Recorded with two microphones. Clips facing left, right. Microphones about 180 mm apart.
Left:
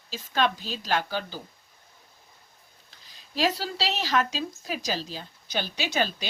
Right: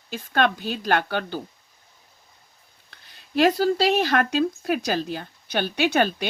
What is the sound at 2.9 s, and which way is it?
Speech, 60° right (ahead or behind).